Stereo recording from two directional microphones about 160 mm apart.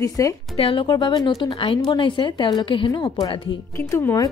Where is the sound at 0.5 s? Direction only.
35° left (ahead or behind).